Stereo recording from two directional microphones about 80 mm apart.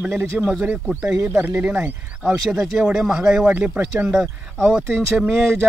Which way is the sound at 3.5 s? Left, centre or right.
Right.